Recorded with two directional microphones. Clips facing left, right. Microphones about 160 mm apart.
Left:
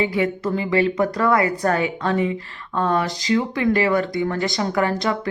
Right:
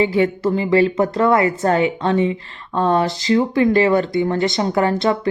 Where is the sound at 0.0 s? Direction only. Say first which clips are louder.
Right 4 dB; 30° right (ahead or behind).